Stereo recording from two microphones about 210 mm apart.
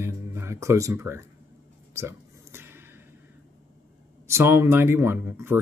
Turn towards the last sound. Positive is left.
turn(degrees=-10)  # may be behind; listen again after turning